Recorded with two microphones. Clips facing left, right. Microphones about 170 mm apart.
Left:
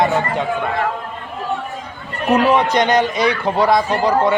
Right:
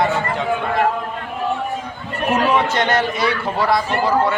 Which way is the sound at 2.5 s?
15° left (ahead or behind).